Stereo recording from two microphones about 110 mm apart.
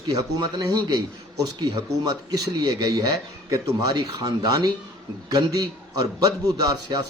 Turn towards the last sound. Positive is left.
turn(degrees=-35)  # may be behind; listen again after turning